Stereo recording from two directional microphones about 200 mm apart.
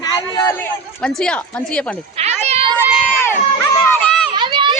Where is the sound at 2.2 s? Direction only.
30° right (ahead or behind).